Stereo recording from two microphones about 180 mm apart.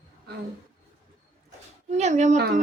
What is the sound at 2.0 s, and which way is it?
Speech, 40° right (ahead or behind).